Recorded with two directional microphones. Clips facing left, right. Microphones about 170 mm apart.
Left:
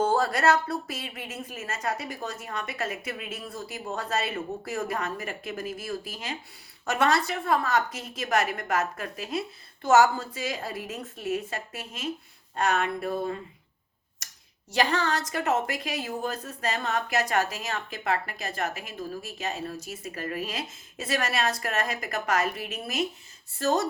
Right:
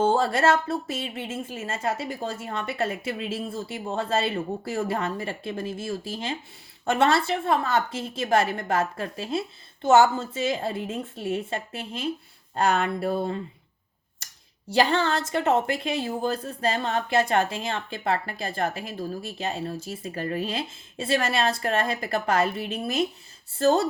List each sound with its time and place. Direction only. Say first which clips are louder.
0.0 s a woman's voice: right 2 dB; 25° right (ahead or behind)
14.2 s a sound: right 1 dB; 30° right (ahead or behind)
14.7 s a woman's voice: right 4 dB; 30° right (ahead or behind)